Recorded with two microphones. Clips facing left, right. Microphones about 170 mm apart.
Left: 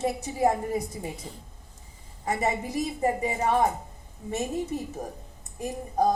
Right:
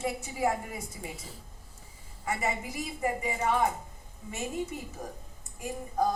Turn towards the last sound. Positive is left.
turn(degrees=35)  # may be behind; listen again after turning